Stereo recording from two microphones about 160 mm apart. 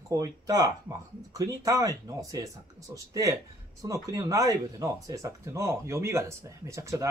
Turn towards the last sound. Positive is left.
turn(degrees=-20)  # may be behind; listen again after turning